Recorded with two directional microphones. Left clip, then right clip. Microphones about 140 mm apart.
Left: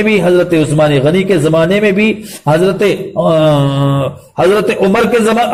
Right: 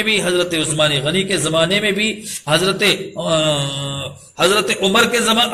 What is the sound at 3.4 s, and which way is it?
A man's voice, 45° left (ahead or behind).